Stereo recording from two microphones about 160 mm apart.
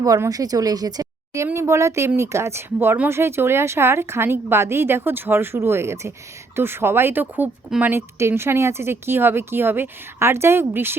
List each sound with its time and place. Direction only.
0.0 s speech: 20° right (ahead or behind)